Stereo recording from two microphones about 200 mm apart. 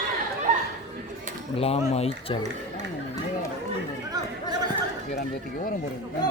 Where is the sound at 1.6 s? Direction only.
30° left (ahead or behind).